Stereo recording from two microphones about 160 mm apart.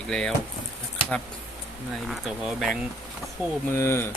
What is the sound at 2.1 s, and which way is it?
Speech, centre (ahead or behind).